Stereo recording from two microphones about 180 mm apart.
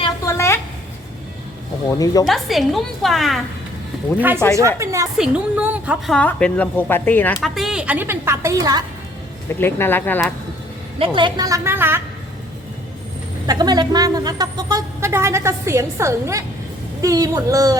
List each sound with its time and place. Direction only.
0.3 s a sound: 15° left (ahead or behind)
1.9 s speech: 20° left (ahead or behind)
2.2 s a woman's voice: centre (ahead or behind)
4.2 s a woman's voice: 10° right (ahead or behind)
5.1 s a woman's voice: 5° right (ahead or behind)
6.1 s speech: 5° left (ahead or behind)
7.4 s a woman's voice: centre (ahead or behind); by 8.8 s 20° right (ahead or behind)
9.6 s speech: 15° left (ahead or behind)
11.0 s a woman's voice: 25° right (ahead or behind); by 12.0 s 10° right (ahead or behind)
13.5 s a woman's voice: 20° right (ahead or behind)